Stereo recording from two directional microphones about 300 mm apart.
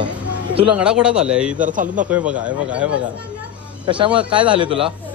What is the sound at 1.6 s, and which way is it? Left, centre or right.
Speech, right.